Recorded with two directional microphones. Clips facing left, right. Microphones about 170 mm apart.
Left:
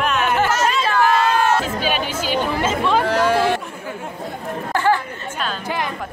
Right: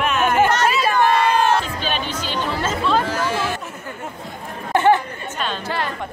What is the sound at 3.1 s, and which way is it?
Speech, 60° left (ahead or behind).